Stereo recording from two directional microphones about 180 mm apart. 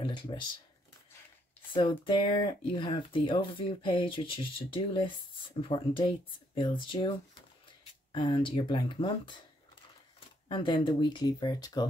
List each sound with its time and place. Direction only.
0.0 s speech: 25° left (ahead or behind)
1.7 s speech: 30° left (ahead or behind)
10.5 s speech: 25° left (ahead or behind)